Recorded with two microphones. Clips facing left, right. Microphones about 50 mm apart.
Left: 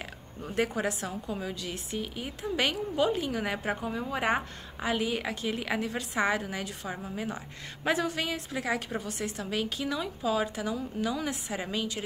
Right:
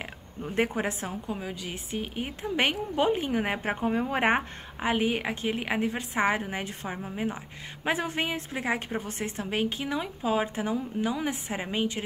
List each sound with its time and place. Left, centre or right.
0.6 s a woman's voice: right
1.2 s a woman's voice: centre; by 4.5 s right
4.7 s a woman's voice: right